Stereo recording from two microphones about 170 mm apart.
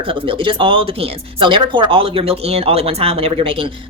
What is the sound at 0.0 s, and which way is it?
A woman's voice, 30° right (ahead or behind).